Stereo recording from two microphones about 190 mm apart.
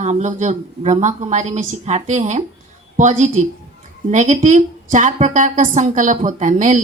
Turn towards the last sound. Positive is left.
turn(degrees=-40)  # may be behind; listen again after turning